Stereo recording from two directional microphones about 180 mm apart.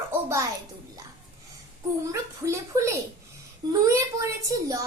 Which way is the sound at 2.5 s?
15° right (ahead or behind).